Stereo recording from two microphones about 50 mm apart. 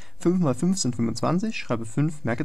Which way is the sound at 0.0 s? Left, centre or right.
Centre.